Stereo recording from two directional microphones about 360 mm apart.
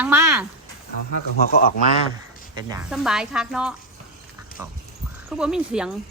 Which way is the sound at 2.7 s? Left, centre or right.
Centre.